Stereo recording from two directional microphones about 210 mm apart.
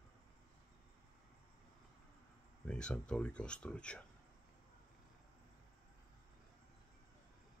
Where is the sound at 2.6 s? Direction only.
5° left (ahead or behind).